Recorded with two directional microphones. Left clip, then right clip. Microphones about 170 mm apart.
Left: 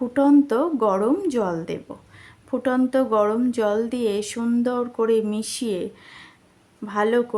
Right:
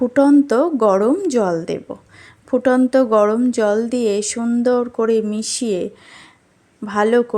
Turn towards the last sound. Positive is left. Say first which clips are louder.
# right 5 dB
turn(degrees=-25)  # may be behind; listen again after turning